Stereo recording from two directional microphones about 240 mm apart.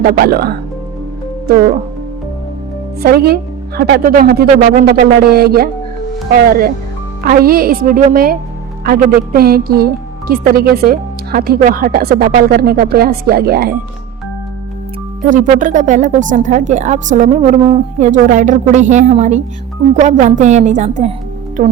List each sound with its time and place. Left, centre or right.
0.0 s speech: right
3.0 s speech: right
15.3 s speech: right